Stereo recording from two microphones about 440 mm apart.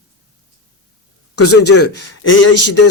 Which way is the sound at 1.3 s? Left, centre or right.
Left.